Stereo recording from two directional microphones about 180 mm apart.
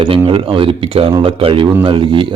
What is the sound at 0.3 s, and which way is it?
Speech, 30° right (ahead or behind).